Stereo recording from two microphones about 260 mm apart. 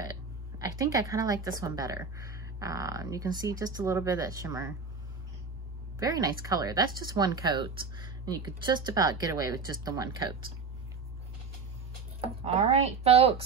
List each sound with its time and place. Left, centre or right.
0.0 s a woman's voice: centre
5.9 s a woman's voice: centre
12.2 s speech: right